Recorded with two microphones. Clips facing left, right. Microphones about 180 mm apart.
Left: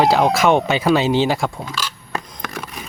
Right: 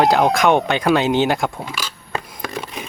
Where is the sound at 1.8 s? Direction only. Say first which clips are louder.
Left 1 dB; 25° right (ahead or behind).